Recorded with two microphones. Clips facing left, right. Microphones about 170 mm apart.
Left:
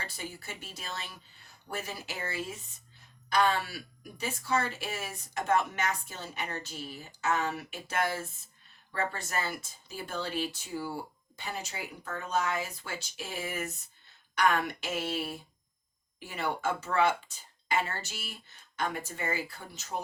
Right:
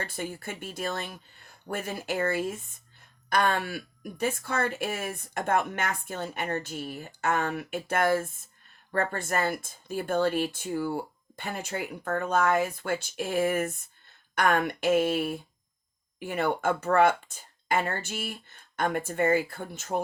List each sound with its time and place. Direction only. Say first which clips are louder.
0.0 s speech: right 7 dB; 55° right (ahead or behind)